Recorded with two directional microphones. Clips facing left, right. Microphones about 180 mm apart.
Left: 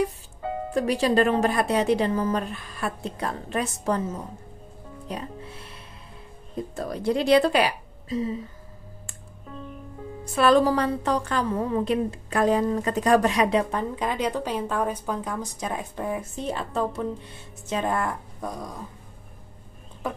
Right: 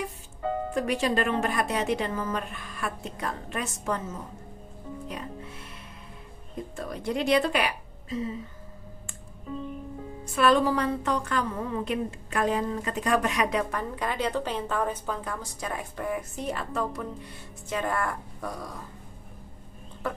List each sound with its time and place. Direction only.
0.7 s a woman's voice: 35° left (ahead or behind)
5.0 s speech: 35° left (ahead or behind)
6.7 s speech: 35° left (ahead or behind)
10.3 s a woman's voice: 35° left (ahead or behind); by 18.8 s 20° left (ahead or behind)